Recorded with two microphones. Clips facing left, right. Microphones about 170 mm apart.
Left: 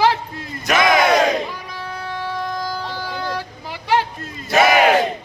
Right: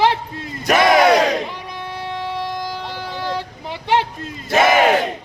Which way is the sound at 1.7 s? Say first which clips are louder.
Right 1 dB; 25° right (ahead or behind).